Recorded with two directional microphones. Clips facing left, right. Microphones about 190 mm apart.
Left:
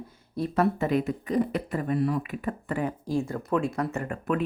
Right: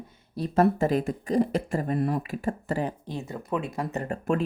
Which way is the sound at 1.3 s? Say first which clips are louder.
Right 2 dB; 30° right (ahead or behind).